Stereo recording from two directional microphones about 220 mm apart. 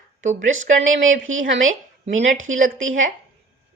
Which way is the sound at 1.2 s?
65° right (ahead or behind).